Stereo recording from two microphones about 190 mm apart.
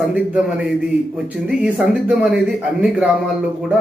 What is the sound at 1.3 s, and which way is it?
A man's voice, 5° right (ahead or behind).